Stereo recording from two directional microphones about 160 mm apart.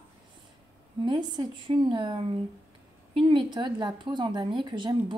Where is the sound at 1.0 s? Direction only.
25° right (ahead or behind).